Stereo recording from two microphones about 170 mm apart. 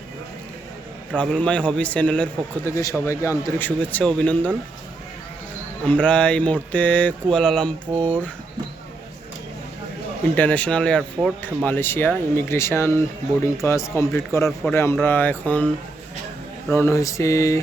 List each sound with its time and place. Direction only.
1.1 s a man's voice: 5° left (ahead or behind)
5.8 s a man's voice: 5° left (ahead or behind)
10.3 s a man's voice: 10° left (ahead or behind)